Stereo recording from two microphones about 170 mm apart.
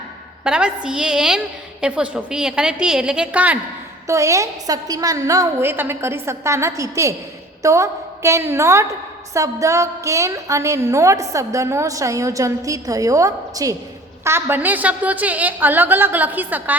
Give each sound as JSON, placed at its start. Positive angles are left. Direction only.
{"t": 0.4, "sound": "a woman's voice", "side_deg": -5}